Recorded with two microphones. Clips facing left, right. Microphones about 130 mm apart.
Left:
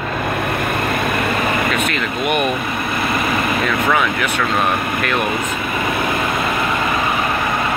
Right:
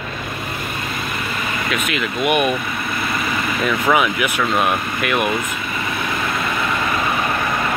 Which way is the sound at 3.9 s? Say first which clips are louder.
Right 1 dB; 10° right (ahead or behind).